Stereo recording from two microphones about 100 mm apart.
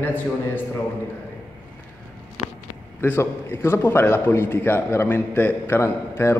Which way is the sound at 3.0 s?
25° left (ahead or behind).